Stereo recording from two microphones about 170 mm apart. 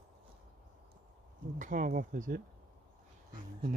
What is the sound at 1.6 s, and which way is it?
Speech, 50° right (ahead or behind).